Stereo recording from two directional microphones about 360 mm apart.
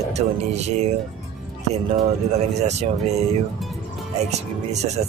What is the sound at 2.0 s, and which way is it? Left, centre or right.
Speech, centre.